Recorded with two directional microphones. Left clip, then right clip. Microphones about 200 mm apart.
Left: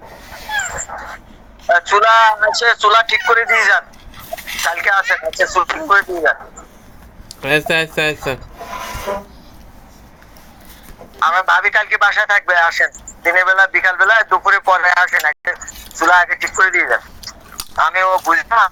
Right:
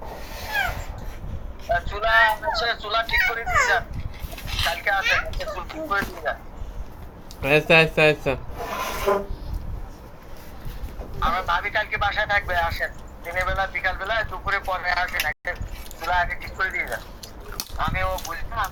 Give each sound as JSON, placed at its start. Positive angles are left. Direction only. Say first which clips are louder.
{"t": 1.7, "sound": "a man's voice", "louder": "left 10 dB", "side_deg": 50}
{"t": 7.4, "sound": "speech", "louder": "left 1 dB", "side_deg": 15}
{"t": 11.2, "sound": "a man's voice", "louder": "left 11 dB", "side_deg": 45}